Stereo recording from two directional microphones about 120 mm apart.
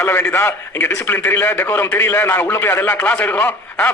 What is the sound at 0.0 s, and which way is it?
A man's voice, 20° left (ahead or behind).